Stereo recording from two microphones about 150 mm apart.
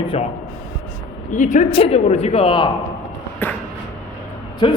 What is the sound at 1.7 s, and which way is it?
Speech, 40° left (ahead or behind).